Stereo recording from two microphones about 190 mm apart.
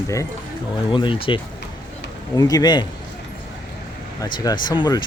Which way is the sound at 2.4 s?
20° left (ahead or behind).